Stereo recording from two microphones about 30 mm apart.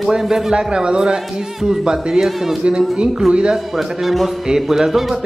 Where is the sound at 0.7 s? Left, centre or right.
Right.